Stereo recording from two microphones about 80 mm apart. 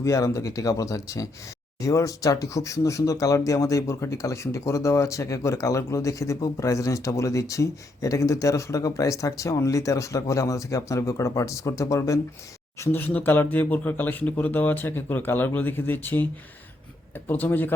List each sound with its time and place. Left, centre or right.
0.0 s speech: left
12.8 s speech: left
17.2 s speech: left